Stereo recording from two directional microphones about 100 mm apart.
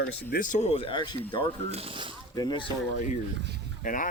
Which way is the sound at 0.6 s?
70° left (ahead or behind).